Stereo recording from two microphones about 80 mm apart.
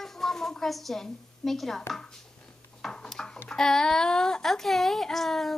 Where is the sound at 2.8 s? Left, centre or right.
Centre.